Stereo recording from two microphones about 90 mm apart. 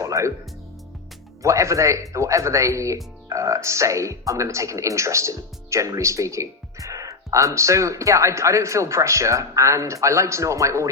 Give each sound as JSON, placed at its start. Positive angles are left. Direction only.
{"t": 0.0, "sound": "music", "side_deg": -35}
{"t": 1.4, "sound": "speech", "side_deg": -35}